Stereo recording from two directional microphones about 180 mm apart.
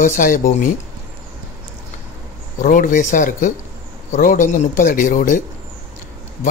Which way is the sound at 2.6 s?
45° left (ahead or behind).